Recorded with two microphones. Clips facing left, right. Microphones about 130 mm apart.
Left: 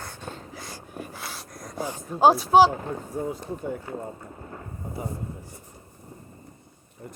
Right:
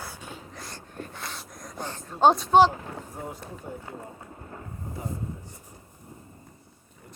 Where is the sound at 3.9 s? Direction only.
55° left (ahead or behind).